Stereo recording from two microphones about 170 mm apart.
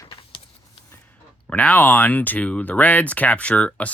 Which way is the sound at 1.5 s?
5° left (ahead or behind).